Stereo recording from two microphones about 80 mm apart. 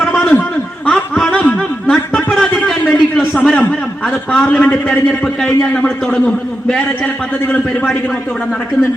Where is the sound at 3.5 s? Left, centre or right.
Centre.